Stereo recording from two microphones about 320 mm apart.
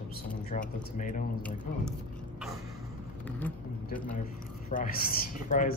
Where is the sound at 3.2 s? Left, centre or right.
Centre.